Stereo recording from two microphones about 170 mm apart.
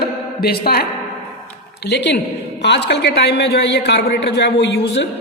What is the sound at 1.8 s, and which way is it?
A woman's voice, 85° left.